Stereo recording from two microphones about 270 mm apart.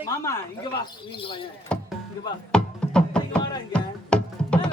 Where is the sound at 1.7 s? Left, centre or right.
Centre.